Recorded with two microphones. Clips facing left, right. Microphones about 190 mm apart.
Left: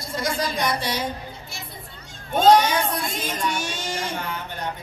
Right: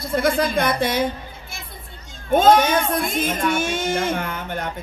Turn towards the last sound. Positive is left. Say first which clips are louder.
# right 5 dB
turn(degrees=-55)  # may be behind; listen again after turning